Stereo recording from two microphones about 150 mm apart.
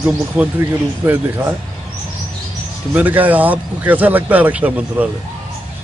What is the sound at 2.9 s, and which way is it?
Speech, 10° right (ahead or behind).